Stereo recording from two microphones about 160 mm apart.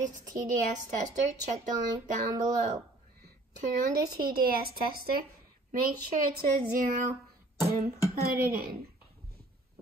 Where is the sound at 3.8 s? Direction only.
65° right (ahead or behind).